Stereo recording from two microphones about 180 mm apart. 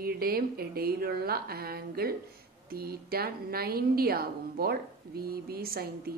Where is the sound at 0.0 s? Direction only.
55° right (ahead or behind).